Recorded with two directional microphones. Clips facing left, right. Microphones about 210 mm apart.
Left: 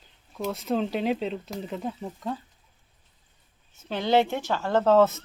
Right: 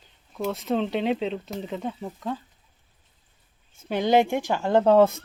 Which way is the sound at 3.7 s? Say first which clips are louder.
Right 2 dB; 10° right (ahead or behind).